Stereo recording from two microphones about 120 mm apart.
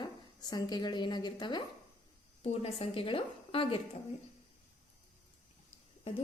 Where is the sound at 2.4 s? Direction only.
55° left (ahead or behind).